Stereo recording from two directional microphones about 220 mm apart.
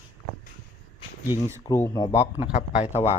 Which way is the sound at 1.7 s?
15° left (ahead or behind).